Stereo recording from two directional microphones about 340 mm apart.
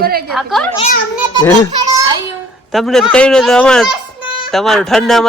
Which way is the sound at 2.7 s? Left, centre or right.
Centre.